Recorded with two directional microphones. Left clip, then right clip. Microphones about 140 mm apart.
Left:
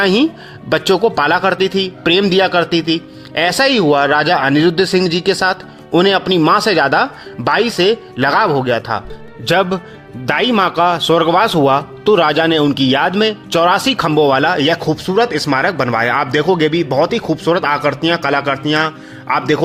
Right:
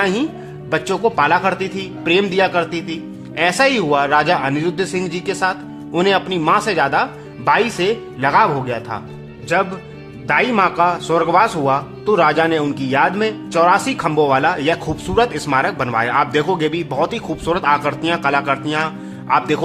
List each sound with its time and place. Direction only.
0.0 s a man's voice: 55° left (ahead or behind)
0.7 s a man's voice: 65° left (ahead or behind); by 19.6 s 25° left (ahead or behind)